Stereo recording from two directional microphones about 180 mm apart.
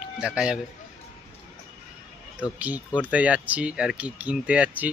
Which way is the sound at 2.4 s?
10° right (ahead or behind).